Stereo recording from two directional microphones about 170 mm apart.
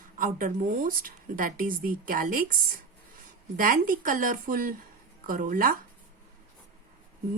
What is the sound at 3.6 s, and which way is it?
A woman's voice, 55° right (ahead or behind).